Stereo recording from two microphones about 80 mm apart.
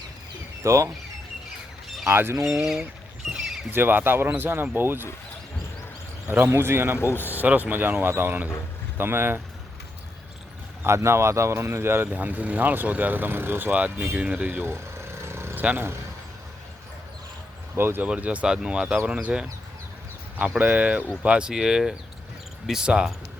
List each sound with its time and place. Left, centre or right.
0.6 s speech: right
2.0 s speech: right
2.4 s speech: centre
3.2 s a sound: centre
3.7 s speech: right
6.2 s speech: right
7.0 s speech: left
7.3 s speech: right
10.8 s speech: right
14.1 s vehicle: centre
15.6 s speech: right
17.7 s speech: right
18.0 s speech: centre